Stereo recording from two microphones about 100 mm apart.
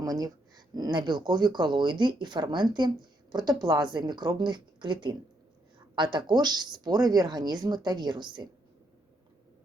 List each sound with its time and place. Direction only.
0.0 s speech: 40° right (ahead or behind)